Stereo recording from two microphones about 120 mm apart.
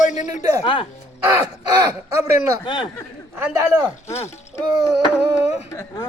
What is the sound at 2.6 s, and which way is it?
Speech, 40° left (ahead or behind).